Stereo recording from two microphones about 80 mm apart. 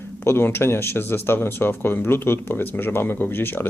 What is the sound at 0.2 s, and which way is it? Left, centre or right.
Speech, left.